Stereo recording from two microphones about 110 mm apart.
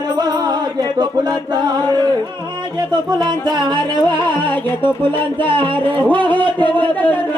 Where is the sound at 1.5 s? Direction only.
40° right (ahead or behind).